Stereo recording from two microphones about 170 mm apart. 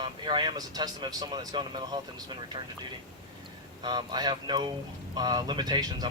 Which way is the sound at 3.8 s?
25° right (ahead or behind).